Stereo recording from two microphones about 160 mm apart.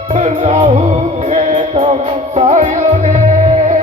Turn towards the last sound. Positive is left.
turn(degrees=-50)  # may be behind; listen again after turning